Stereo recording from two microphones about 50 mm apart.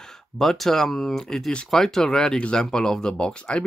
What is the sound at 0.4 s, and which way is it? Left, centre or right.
Speech, centre.